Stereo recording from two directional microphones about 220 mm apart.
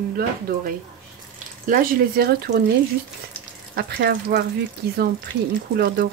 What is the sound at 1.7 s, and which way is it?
Speech, 40° right (ahead or behind).